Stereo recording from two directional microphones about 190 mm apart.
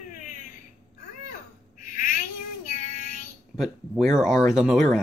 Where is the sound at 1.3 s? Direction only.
45° left (ahead or behind).